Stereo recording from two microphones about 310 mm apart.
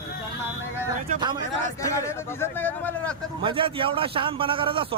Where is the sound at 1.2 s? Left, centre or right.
Centre.